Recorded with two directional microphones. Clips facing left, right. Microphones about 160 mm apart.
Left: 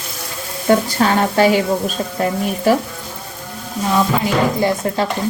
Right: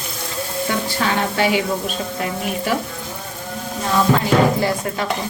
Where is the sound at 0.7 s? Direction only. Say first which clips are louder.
Left 9 dB; 40° left (ahead or behind).